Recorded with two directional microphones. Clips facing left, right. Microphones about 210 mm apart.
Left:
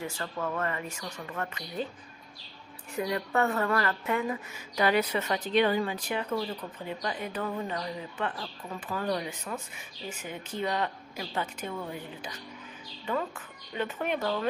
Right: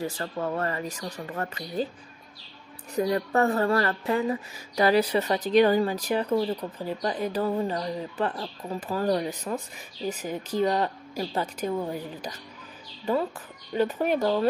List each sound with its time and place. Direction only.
0.0 s speech: 35° right (ahead or behind)
3.0 s speech: 35° right (ahead or behind)